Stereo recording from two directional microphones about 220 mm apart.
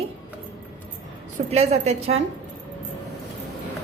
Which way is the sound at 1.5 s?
30° right (ahead or behind).